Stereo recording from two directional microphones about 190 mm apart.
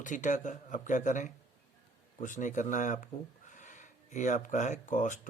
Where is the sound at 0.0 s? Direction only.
40° left (ahead or behind).